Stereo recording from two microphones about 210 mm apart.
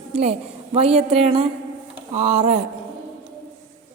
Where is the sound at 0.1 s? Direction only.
30° right (ahead or behind).